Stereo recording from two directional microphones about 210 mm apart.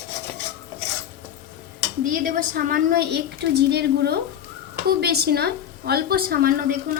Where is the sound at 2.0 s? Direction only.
40° right (ahead or behind).